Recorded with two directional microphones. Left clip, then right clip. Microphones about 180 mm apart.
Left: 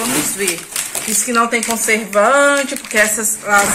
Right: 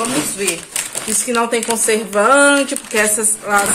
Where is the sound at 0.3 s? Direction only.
15° right (ahead or behind).